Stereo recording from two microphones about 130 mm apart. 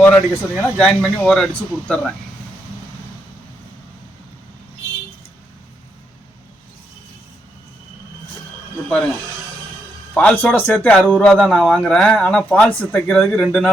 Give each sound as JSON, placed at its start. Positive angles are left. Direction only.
{"t": 0.0, "sound": "a man's voice", "side_deg": 10}
{"t": 10.2, "sound": "a man's voice", "side_deg": 10}